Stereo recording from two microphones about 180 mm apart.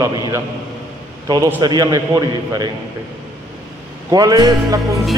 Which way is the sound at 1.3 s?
20° right (ahead or behind).